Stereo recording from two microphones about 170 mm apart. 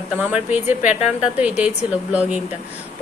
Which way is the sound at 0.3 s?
10° right (ahead or behind).